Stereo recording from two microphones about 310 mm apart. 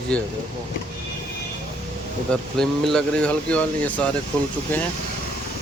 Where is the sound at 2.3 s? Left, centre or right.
Centre.